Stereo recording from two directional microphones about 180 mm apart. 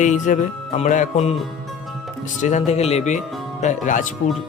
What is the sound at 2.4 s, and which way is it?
Speech, 40° left (ahead or behind).